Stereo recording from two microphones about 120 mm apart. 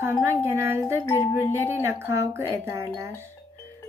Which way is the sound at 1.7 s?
20° right (ahead or behind).